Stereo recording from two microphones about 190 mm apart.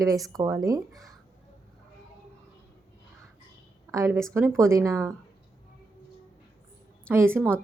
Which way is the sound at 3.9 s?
15° right (ahead or behind).